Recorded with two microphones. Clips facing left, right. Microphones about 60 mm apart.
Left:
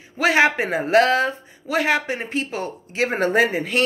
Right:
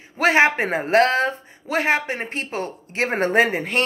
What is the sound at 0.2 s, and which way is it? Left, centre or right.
A man's voice, right.